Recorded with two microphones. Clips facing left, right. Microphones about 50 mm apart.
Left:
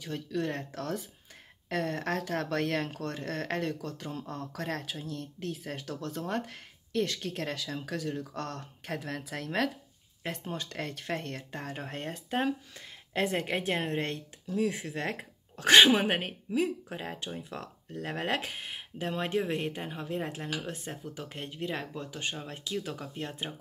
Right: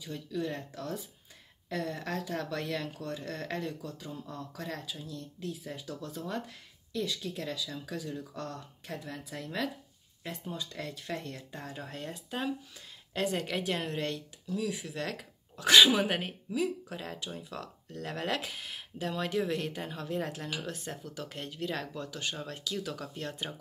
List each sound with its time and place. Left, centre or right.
0.0 s speech: left